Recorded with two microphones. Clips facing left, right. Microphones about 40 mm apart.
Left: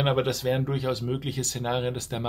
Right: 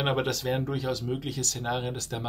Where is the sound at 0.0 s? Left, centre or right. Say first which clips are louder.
Left 3 dB; centre.